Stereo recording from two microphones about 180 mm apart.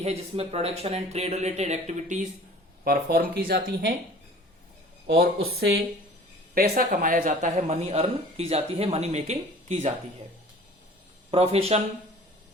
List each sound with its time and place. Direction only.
0.0 s speech: 35° right (ahead or behind)
2.8 s speech: 55° right (ahead or behind)
5.0 s speech: 60° right (ahead or behind)
6.5 s speech: 55° right (ahead or behind); by 9.9 s 35° right (ahead or behind)
11.3 s speech: 35° right (ahead or behind)